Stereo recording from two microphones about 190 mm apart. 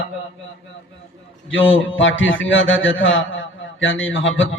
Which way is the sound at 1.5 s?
85° left.